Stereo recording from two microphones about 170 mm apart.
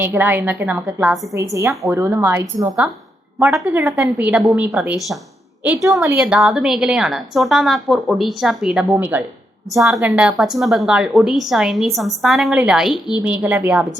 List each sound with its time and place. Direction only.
0.0 s a woman's voice: 10° right (ahead or behind)
1.3 s a woman's voice: 15° right (ahead or behind)